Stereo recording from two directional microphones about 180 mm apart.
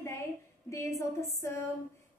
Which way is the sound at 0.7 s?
15° left (ahead or behind).